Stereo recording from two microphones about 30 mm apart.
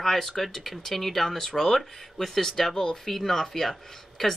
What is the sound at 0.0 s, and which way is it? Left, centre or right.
Speech, centre.